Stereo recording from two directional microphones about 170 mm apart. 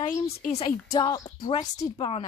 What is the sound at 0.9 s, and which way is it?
Speech, 20° left (ahead or behind).